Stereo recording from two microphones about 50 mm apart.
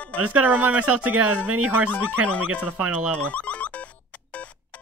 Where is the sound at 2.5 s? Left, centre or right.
Right.